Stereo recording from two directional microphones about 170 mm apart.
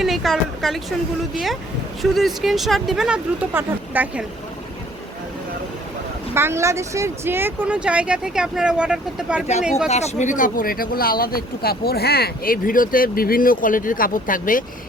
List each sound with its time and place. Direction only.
0.0 s speech: centre (ahead or behind)
6.3 s speech: 15° right (ahead or behind)
9.9 s speech: 40° left (ahead or behind)